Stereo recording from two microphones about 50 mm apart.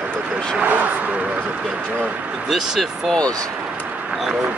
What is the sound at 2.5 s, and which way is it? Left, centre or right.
Speech, centre.